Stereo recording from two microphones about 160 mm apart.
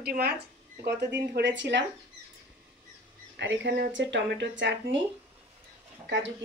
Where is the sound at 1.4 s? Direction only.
90° right.